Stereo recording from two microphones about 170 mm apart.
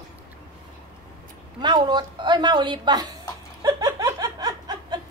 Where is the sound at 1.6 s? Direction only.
25° right (ahead or behind).